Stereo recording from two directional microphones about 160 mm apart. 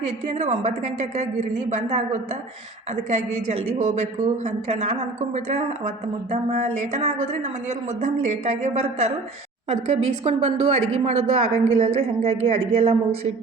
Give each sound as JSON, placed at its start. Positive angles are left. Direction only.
{"t": 0.3, "sound": "a woman's voice", "side_deg": -45}